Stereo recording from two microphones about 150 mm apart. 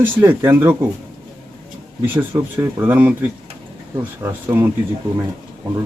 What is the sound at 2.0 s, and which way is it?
Speech, 15° right (ahead or behind).